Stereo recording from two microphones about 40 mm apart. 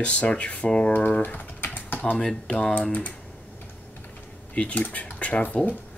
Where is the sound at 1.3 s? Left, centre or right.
Left.